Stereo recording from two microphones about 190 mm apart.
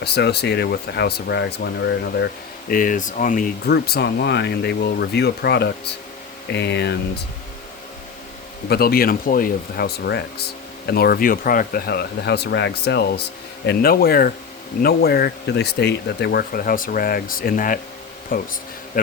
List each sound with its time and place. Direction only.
0.0 s speech: 60° left (ahead or behind)
8.7 s speech: 55° left (ahead or behind)